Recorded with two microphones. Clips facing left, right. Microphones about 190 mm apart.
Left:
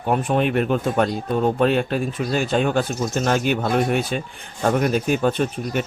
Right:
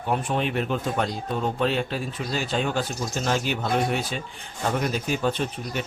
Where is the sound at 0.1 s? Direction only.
55° left (ahead or behind).